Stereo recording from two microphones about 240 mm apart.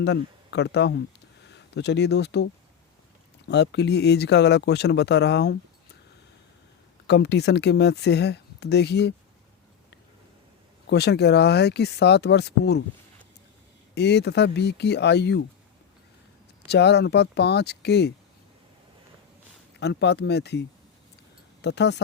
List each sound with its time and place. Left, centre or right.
0.0 s speech: left
7.1 s speech: left
10.8 s speech: left
13.9 s speech: left
16.6 s speech: left
19.8 s speech: left